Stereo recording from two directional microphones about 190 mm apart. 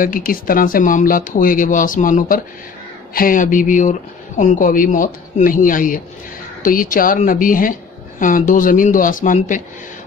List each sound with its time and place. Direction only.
0.0 s speech: 50° left (ahead or behind)